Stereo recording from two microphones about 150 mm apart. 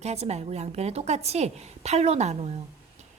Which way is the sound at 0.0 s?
45° right (ahead or behind).